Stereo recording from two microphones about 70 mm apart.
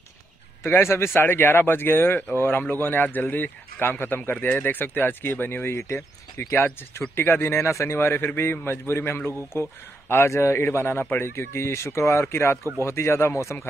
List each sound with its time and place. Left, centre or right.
0.7 s a man's voice: left